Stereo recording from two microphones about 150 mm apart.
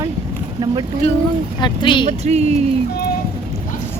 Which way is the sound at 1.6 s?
30° left (ahead or behind).